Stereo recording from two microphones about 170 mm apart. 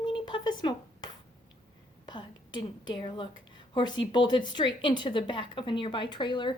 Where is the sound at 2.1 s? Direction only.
25° left (ahead or behind).